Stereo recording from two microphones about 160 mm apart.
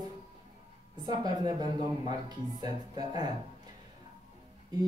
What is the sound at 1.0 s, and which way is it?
A woman's voice, 25° right (ahead or behind).